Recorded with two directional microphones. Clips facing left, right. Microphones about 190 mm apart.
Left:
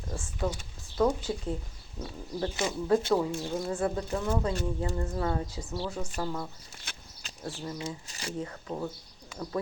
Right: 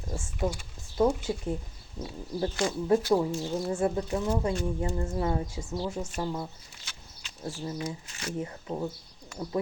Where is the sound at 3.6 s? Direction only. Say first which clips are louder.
Right 4 dB; 25° right (ahead or behind).